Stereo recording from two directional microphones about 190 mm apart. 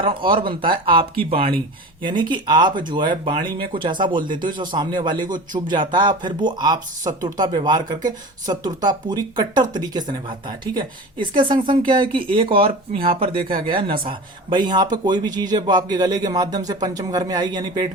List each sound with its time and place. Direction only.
0.0 s speech: 25° right (ahead or behind)